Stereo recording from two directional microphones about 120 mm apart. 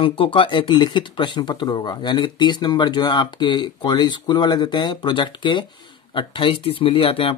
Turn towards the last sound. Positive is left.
turn(degrees=50)  # may be behind; listen again after turning